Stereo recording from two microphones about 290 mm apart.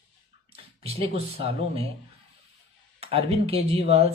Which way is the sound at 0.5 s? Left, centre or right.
Centre.